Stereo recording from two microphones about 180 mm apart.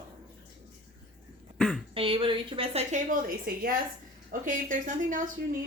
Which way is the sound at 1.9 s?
30° right (ahead or behind).